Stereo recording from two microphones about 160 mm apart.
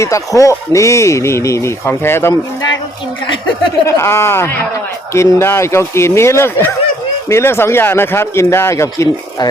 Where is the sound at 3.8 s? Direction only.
15° left (ahead or behind).